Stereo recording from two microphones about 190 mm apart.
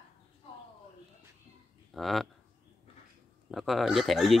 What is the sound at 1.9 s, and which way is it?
Speech, centre (ahead or behind).